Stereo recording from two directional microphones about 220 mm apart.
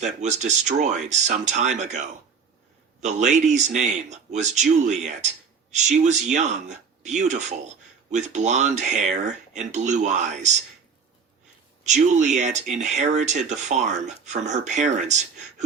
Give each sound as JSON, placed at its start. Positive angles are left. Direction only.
{"t": 0.0, "sound": "speech", "side_deg": -30}
{"t": 3.0, "sound": "speech", "side_deg": -35}
{"t": 11.9, "sound": "speech", "side_deg": -30}